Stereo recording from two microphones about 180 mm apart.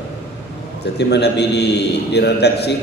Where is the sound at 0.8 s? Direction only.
70° left (ahead or behind).